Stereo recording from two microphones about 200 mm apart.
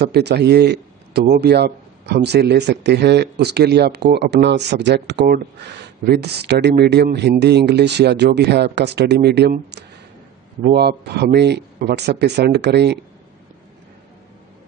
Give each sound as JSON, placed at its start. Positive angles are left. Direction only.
{"t": 0.0, "sound": "a man's voice", "side_deg": -55}